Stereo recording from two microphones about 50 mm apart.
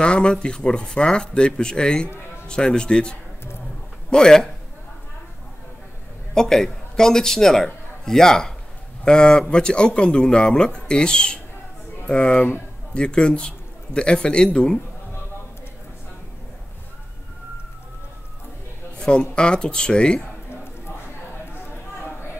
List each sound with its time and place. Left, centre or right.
0.0 s speech: centre
6.3 s a man's voice: centre
18.9 s speech: centre